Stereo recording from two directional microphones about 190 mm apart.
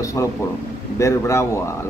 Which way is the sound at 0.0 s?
15° left (ahead or behind).